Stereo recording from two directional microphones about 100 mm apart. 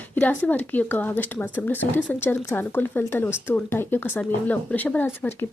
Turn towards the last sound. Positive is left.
turn(degrees=25)  # may be behind; listen again after turning